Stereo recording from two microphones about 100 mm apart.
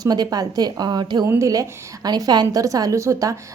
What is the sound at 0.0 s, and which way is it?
A woman's voice, 40° right (ahead or behind).